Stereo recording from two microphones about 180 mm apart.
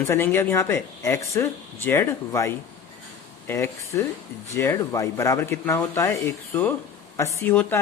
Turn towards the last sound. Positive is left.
turn(degrees=15)  # may be behind; listen again after turning